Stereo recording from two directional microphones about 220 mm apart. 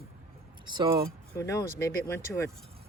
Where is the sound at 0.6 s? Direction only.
20° right (ahead or behind).